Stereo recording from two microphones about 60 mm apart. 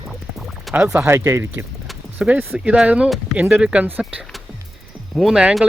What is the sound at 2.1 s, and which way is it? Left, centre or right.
Speech, right.